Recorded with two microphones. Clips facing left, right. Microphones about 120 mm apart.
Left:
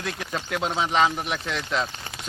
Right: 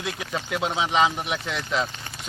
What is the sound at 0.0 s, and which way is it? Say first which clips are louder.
Speech: even; 5° right (ahead or behind).